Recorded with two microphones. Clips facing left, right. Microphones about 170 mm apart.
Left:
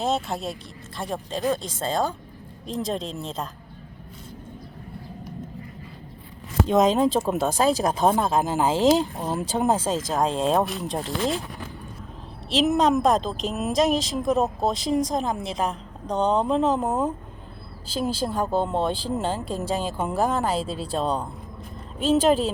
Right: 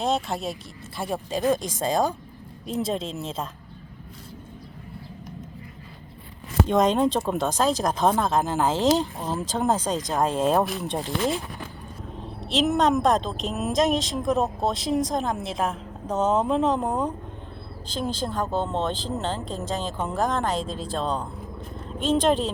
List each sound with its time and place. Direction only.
0.0 s a woman's voice: centre (ahead or behind)
1.4 s a woman's voice: 15° right (ahead or behind)
2.6 s a woman's voice: 5° right (ahead or behind)
6.7 s a woman's voice: 5° left (ahead or behind)
12.5 s a woman's voice: centre (ahead or behind)